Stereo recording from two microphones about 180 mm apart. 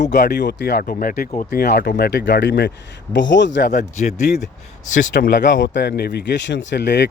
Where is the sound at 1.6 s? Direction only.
60° left (ahead or behind).